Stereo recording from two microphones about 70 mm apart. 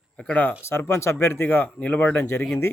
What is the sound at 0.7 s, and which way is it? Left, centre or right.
Speech, left.